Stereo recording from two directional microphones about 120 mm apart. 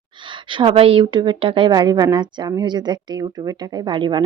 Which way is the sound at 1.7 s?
35° right (ahead or behind).